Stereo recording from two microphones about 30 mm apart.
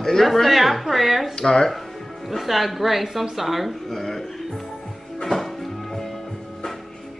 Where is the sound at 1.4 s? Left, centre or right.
Left.